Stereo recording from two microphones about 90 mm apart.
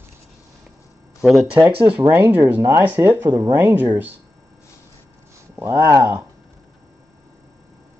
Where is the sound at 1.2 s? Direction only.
Centre (ahead or behind).